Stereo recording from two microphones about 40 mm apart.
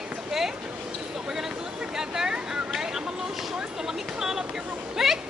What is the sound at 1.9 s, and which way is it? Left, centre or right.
Vehicle, centre.